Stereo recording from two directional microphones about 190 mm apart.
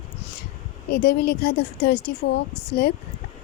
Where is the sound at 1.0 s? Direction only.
60° left (ahead or behind).